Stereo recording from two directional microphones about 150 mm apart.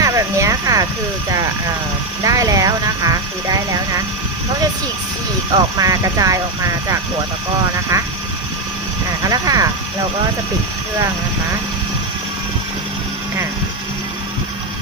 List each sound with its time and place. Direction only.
0.0 s a sound: 20° right (ahead or behind)
2.2 s speech: 20° right (ahead or behind)
5.5 s speech: 25° right (ahead or behind)
9.2 s speech: 25° right (ahead or behind)